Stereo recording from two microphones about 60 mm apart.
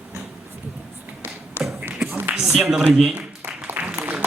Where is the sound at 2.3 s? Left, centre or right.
Centre.